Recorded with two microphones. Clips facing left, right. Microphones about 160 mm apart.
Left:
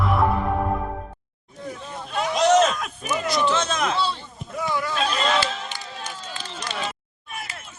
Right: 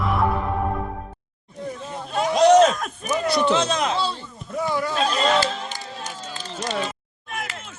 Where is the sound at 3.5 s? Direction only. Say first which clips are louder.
Right 2 dB; 25° right (ahead or behind).